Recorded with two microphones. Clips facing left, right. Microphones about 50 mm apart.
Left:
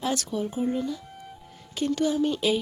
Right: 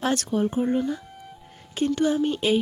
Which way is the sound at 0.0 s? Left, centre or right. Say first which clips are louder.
Right 4 dB; right.